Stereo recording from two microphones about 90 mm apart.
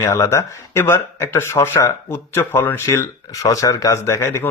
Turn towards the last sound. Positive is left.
turn(degrees=30)  # may be behind; listen again after turning